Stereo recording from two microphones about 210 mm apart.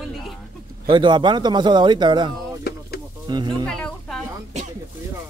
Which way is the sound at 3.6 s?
5° left (ahead or behind).